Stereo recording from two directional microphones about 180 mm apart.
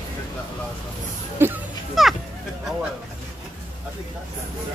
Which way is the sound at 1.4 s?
10° right (ahead or behind).